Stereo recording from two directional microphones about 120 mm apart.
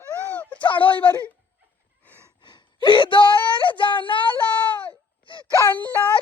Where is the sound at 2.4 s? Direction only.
40° left (ahead or behind).